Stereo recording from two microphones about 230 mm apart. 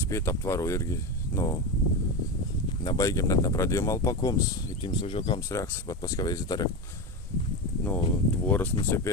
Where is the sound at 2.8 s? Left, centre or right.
Centre.